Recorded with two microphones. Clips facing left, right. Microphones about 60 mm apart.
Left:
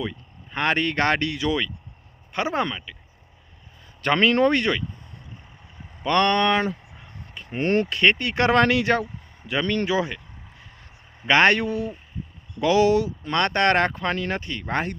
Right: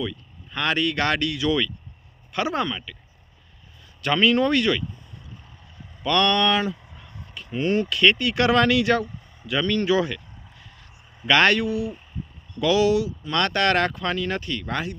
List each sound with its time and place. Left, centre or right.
0.0 s speech: left
4.0 s speech: left
6.0 s speech: left
7.3 s a sound: left
7.9 s speech: left
10.6 s a sound: left
12.5 s speech: left
13.3 s speech: left